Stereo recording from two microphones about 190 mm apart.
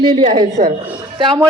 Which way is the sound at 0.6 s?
50° right (ahead or behind).